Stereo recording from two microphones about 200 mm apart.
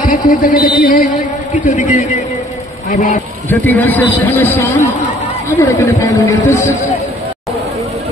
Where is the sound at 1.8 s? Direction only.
40° left (ahead or behind).